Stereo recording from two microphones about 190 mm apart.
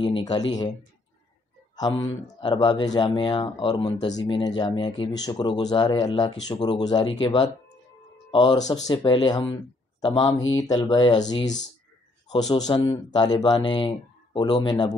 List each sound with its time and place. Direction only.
0.0 s speech: 25° left (ahead or behind)
2.2 s speech: 25° left (ahead or behind)